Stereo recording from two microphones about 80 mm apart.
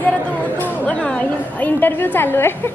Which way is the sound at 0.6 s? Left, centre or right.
Centre.